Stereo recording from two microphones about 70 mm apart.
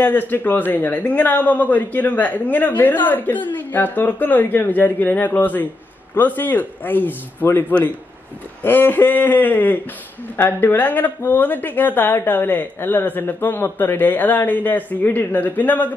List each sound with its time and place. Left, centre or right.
0.0 s speech: left
8.6 s speech: left